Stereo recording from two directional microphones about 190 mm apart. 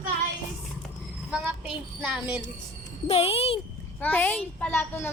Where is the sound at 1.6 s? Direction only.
5° right (ahead or behind).